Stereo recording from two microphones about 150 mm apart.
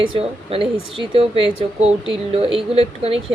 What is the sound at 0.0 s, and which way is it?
Speech, 40° right (ahead or behind).